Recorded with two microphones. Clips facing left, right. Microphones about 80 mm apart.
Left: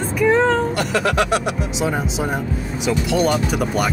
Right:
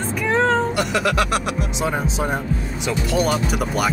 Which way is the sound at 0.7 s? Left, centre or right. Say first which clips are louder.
Left 1 dB; left.